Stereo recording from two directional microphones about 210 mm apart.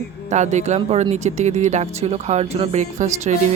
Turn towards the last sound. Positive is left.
turn(degrees=-35)  # may be behind; listen again after turning